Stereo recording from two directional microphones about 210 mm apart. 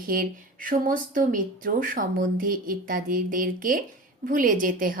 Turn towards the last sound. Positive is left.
turn(degrees=-40)  # may be behind; listen again after turning